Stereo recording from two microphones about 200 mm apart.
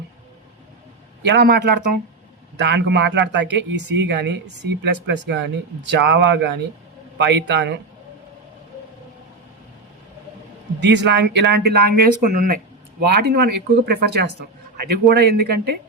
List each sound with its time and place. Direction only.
1.2 s speech: 55° right (ahead or behind)
10.8 s speech: 60° right (ahead or behind); by 12.5 s 40° right (ahead or behind)
13.0 s speech: 55° right (ahead or behind)